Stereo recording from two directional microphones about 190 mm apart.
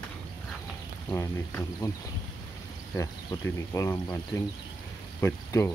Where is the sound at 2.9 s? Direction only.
15° left (ahead or behind).